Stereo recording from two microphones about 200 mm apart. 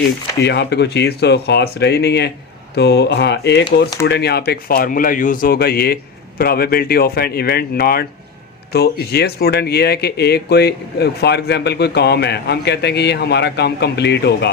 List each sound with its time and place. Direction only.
0.4 s speech: 60° left (ahead or behind)